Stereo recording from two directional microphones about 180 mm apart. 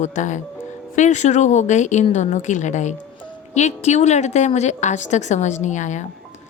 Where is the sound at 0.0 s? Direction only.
45° left (ahead or behind).